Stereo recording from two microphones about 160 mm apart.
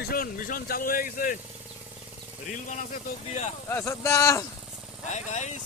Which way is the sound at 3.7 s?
15° left (ahead or behind).